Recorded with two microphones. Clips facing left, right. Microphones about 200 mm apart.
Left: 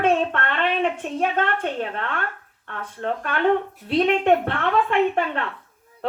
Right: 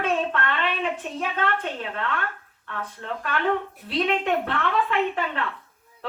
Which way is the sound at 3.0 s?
45° left (ahead or behind).